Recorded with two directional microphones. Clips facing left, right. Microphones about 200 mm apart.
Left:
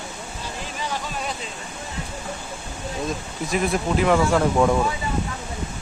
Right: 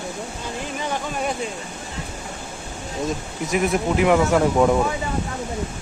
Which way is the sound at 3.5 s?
20° right (ahead or behind).